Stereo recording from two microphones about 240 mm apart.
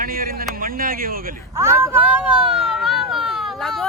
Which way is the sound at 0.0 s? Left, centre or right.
Right.